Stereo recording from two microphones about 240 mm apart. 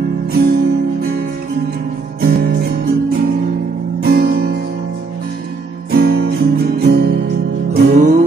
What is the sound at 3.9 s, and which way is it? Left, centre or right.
Guitar, right.